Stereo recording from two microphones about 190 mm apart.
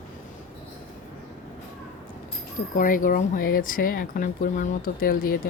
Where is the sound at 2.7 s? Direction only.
45° left (ahead or behind).